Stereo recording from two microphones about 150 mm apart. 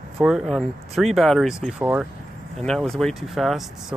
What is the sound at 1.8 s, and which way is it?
Speech, 10° right (ahead or behind).